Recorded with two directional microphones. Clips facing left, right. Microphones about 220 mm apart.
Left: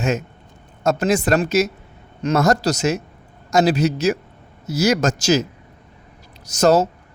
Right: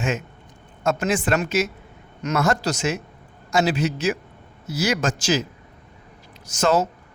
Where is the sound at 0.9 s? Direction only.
40° left (ahead or behind).